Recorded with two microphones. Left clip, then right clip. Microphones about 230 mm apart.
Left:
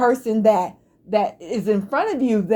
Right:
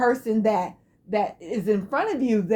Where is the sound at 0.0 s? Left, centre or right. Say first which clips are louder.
Left 5 dB; left.